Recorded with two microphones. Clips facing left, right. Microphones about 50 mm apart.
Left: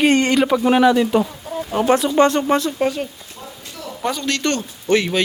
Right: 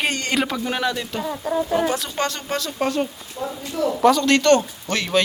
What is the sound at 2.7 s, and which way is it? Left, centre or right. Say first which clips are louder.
Speech: left 2 dB; centre.